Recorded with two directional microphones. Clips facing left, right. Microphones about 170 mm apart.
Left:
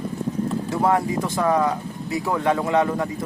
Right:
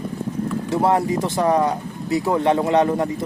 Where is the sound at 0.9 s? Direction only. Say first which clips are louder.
Right 1 dB; 25° right (ahead or behind).